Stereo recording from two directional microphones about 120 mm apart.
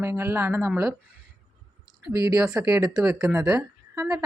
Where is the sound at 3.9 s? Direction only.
25° right (ahead or behind).